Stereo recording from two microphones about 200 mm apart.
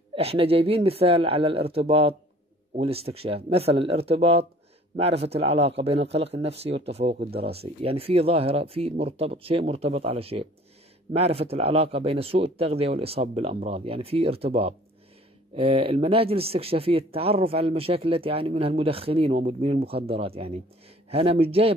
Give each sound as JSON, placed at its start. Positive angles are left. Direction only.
{"t": 0.1, "sound": "speech", "side_deg": -30}